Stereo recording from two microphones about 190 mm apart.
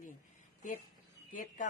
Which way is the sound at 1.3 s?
45° left (ahead or behind).